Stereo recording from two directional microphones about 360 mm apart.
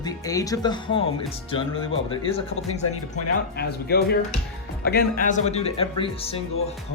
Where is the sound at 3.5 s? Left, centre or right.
Left.